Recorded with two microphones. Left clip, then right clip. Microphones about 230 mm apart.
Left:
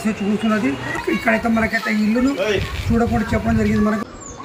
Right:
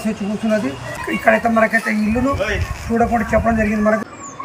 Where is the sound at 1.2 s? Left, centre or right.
Centre.